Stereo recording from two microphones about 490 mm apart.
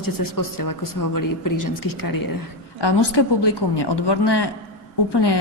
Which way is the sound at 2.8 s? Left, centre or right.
Left.